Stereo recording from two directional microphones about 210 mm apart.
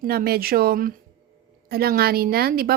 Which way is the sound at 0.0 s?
45° right (ahead or behind).